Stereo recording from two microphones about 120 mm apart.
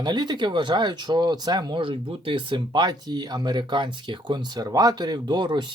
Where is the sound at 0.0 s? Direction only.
35° right (ahead or behind).